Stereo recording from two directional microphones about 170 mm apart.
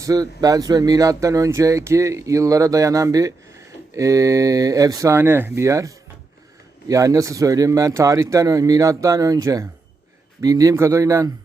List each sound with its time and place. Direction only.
0.0 s speech: 20° right (ahead or behind)